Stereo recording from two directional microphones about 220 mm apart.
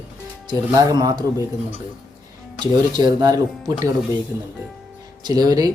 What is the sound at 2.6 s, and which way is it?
Speech, 20° right (ahead or behind).